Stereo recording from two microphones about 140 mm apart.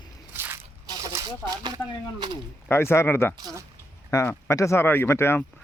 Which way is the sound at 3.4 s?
30° right (ahead or behind).